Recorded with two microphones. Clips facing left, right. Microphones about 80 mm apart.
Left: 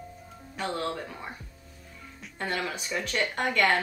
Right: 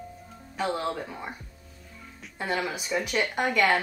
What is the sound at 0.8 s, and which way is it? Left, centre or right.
A woman's voice, centre.